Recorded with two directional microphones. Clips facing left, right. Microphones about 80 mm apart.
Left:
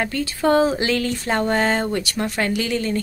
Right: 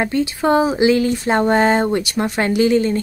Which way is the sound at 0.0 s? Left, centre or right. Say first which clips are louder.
Right 3 dB; right.